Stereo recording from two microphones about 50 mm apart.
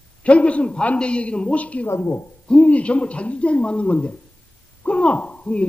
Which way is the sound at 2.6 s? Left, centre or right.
Left.